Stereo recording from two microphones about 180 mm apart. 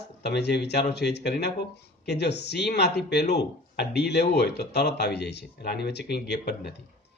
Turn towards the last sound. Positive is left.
turn(degrees=65)  # may be behind; listen again after turning